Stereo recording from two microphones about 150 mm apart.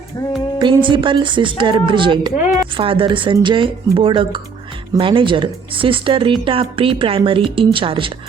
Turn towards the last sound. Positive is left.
turn(degrees=-35)  # may be behind; listen again after turning